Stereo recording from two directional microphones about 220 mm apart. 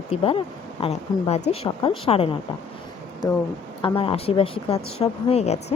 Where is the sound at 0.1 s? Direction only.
25° left (ahead or behind).